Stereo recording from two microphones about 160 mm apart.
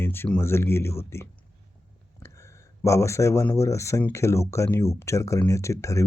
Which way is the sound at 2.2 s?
20° left (ahead or behind).